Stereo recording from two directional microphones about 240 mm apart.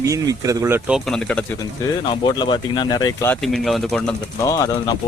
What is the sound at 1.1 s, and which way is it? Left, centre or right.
Speech, centre.